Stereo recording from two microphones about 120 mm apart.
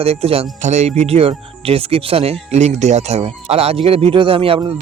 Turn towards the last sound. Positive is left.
turn(degrees=-50)  # may be behind; listen again after turning